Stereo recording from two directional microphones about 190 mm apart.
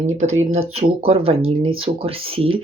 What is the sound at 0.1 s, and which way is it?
Speech, 35° right (ahead or behind).